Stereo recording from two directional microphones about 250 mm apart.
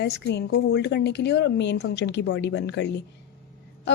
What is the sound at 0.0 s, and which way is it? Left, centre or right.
A woman's voice, left.